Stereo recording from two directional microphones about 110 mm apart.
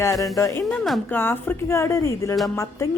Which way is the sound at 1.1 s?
20° left (ahead or behind).